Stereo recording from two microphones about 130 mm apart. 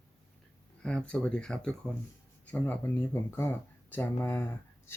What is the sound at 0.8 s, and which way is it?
Speech, 5° left (ahead or behind).